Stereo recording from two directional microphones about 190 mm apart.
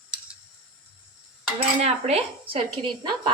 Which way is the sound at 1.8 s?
35° right (ahead or behind).